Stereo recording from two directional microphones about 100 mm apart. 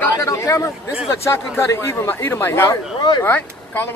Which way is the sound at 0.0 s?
30° left (ahead or behind).